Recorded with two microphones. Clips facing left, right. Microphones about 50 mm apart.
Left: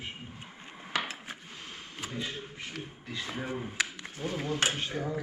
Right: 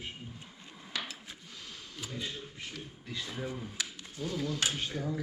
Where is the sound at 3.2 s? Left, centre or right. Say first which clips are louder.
Left 4 dB; left.